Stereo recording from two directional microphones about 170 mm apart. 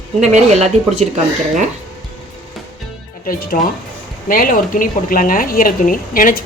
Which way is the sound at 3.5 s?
50° left (ahead or behind).